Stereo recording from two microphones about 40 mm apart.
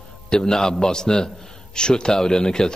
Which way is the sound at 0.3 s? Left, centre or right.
Centre.